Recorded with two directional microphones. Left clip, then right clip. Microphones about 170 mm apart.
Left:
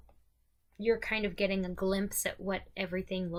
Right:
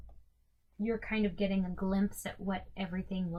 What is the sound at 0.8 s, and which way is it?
Speech, 15° left (ahead or behind).